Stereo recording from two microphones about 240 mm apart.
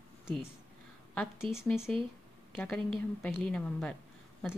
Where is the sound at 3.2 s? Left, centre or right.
Centre.